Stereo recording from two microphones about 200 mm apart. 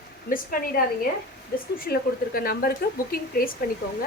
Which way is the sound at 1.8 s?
50° left (ahead or behind).